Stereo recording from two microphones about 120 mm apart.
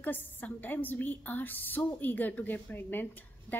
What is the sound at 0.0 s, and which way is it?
A woman's voice, 15° left (ahead or behind).